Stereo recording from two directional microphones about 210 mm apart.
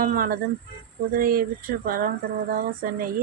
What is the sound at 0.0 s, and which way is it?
Speech, 40° right (ahead or behind).